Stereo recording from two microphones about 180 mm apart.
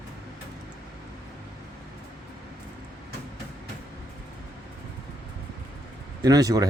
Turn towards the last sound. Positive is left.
turn(degrees=-20)  # may be behind; listen again after turning